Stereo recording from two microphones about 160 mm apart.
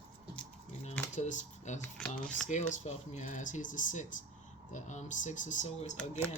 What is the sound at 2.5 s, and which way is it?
Speech, 45° left (ahead or behind).